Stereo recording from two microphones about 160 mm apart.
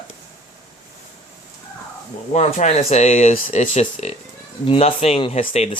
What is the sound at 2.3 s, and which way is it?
Speech, 40° left (ahead or behind).